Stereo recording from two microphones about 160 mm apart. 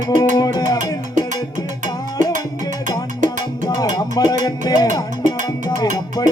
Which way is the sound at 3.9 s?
25° left (ahead or behind).